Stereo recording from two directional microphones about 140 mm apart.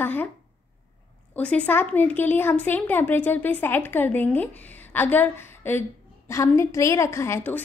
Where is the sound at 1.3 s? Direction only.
10° left (ahead or behind).